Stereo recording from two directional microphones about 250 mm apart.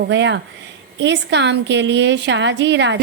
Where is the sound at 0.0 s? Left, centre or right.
Right.